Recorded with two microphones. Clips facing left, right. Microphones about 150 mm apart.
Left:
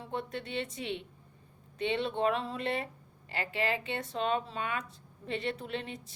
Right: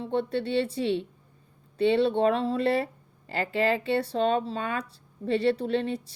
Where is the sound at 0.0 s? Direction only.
30° right (ahead or behind).